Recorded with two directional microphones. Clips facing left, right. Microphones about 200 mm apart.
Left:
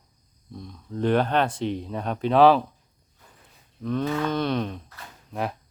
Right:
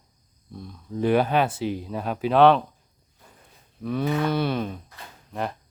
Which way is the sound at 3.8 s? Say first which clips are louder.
Right 1 dB; 10° right (ahead or behind).